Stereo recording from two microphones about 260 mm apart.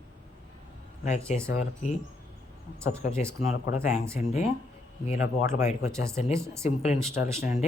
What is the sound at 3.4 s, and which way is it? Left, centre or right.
Speech, left.